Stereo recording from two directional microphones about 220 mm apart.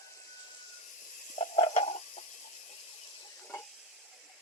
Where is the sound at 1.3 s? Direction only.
30° left (ahead or behind).